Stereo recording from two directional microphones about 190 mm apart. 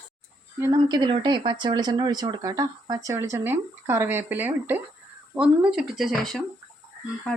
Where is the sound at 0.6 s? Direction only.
20° right (ahead or behind).